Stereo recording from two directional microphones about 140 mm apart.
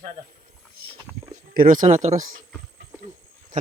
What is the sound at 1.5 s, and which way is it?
Speech, 75° right (ahead or behind).